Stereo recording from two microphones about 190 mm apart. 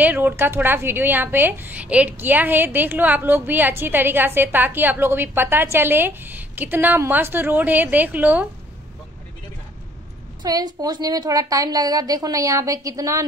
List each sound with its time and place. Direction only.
0.0 s a woman's voice: 10° right (ahead or behind)
10.4 s a woman's voice: 20° right (ahead or behind)